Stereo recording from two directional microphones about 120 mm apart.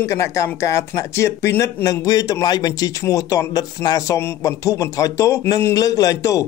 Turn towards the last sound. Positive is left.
turn(degrees=25)  # may be behind; listen again after turning